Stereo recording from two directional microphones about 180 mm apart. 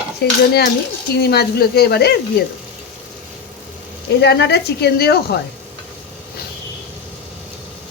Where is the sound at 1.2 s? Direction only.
65° left (ahead or behind).